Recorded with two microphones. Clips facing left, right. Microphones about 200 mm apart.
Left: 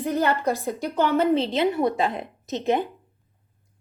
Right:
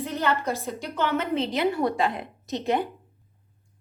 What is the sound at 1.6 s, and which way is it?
A woman's voice, 20° left (ahead or behind).